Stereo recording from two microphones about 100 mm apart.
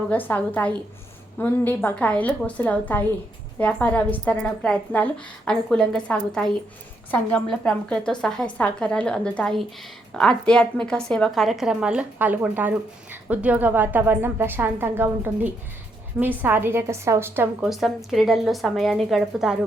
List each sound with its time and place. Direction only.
0.1 s a woman's voice: 15° left (ahead or behind); by 17.5 s 20° right (ahead or behind)
17.6 s a woman's voice: centre (ahead or behind)